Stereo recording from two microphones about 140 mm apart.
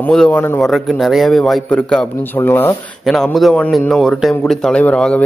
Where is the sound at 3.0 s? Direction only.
Centre (ahead or behind).